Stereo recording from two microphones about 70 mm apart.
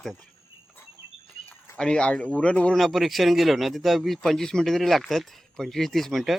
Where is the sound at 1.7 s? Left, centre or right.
Centre.